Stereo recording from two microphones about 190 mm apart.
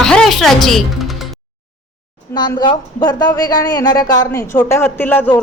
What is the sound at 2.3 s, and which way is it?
Speech, 25° left (ahead or behind).